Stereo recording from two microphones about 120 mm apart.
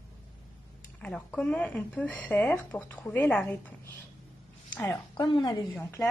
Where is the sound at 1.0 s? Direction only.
10° left (ahead or behind).